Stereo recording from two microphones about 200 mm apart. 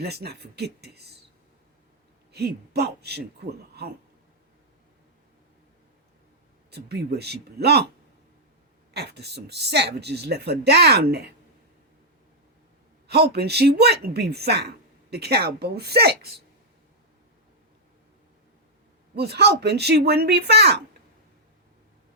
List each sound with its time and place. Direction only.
0.0 s speech: 55° right (ahead or behind)
2.3 s speech: 55° right (ahead or behind)
6.7 s a woman's voice: 55° right (ahead or behind)
8.9 s a woman's voice: 55° right (ahead or behind)
13.1 s a woman's voice: 55° right (ahead or behind)
19.1 s a woman's voice: 55° right (ahead or behind)